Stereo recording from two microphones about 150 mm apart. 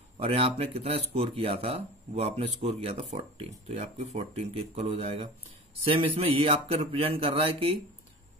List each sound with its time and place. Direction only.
0.2 s speech: 45° right (ahead or behind)